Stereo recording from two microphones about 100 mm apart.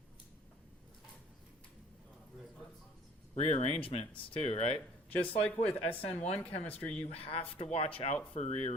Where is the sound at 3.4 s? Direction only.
80° left.